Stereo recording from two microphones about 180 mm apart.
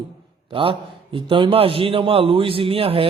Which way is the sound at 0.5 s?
30° right (ahead or behind).